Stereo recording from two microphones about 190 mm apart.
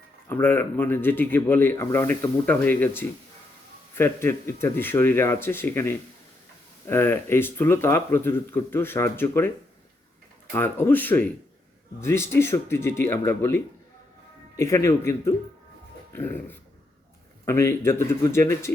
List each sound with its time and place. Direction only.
0.3 s speech: 10° left (ahead or behind)
10.5 s speech: 10° left (ahead or behind)